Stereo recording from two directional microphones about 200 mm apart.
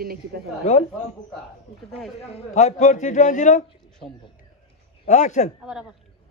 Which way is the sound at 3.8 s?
5° left (ahead or behind).